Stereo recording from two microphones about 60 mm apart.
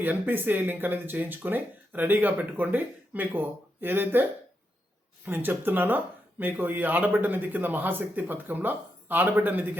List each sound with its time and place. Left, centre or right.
0.0 s speech: right